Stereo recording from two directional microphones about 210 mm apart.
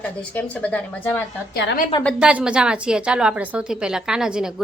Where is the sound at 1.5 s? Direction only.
50° left (ahead or behind).